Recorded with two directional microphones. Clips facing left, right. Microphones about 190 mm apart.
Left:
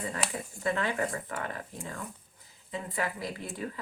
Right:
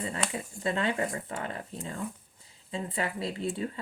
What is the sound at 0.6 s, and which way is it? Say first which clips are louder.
Speech: right 1 dB; 25° right (ahead or behind).